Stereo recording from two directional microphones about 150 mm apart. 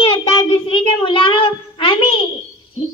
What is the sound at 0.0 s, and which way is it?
Child singing, 35° left (ahead or behind).